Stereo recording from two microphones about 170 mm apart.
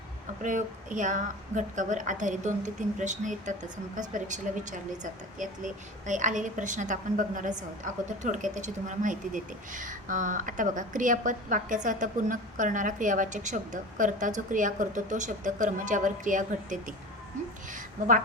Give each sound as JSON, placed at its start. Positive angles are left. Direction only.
{"t": 0.4, "sound": "a woman's voice", "side_deg": -50}